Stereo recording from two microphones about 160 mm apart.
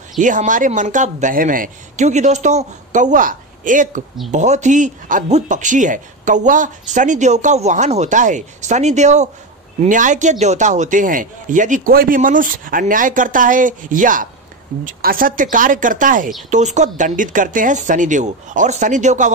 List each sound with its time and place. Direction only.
0.2 s speech: 55° right (ahead or behind)